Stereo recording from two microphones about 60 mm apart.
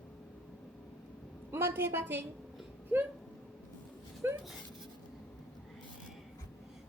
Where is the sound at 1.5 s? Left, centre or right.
Right.